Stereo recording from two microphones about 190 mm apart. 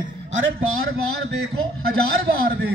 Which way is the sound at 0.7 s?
90° right.